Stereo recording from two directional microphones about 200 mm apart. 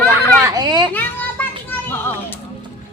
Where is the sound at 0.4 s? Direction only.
20° right (ahead or behind).